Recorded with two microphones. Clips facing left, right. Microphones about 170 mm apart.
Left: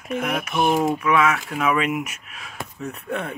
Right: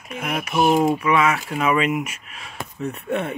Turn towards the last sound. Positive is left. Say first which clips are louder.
# right 4 dB
turn(degrees=0)  # may be behind; listen again after turning